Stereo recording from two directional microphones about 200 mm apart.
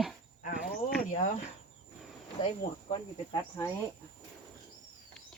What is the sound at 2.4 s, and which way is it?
Speech, 25° left (ahead or behind).